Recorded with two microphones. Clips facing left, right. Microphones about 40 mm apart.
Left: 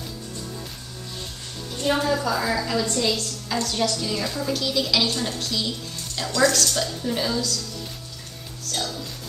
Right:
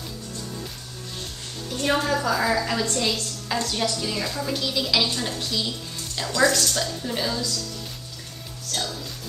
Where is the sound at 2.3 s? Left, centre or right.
Centre.